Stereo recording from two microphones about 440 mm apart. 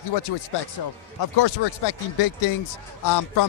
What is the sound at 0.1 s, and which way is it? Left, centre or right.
A man's voice, left.